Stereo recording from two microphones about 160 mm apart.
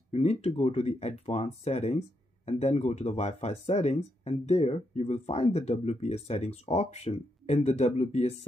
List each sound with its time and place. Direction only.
0.1 s speech: 40° left (ahead or behind)